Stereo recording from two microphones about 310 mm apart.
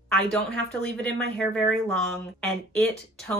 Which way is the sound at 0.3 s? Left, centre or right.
Centre.